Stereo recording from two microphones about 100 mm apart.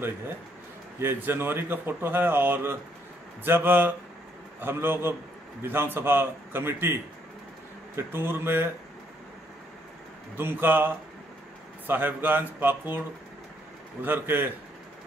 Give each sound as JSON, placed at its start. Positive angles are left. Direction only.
{"t": 1.0, "sound": "a man's voice", "side_deg": -25}
{"t": 10.3, "sound": "a man's voice", "side_deg": -20}
{"t": 11.9, "sound": "a man's voice", "side_deg": -20}
{"t": 14.0, "sound": "a man's voice", "side_deg": -20}